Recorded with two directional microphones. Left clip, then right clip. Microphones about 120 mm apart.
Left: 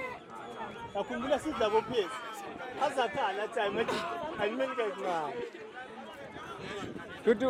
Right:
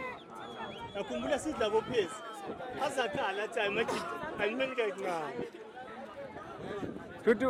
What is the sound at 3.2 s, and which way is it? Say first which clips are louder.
Speech: left 1 dB; 25° right (ahead or behind).